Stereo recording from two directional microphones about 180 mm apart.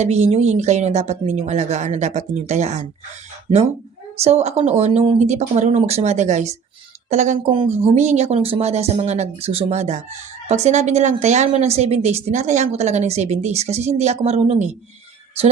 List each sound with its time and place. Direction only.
0.0 s speech: 35° right (ahead or behind)
4.2 s speech: 35° right (ahead or behind)
7.5 s speech: 30° right (ahead or behind)